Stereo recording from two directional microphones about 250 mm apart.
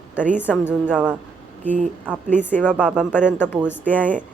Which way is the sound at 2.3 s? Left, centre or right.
Centre.